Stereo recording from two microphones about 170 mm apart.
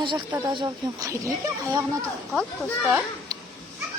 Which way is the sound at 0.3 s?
15° right (ahead or behind).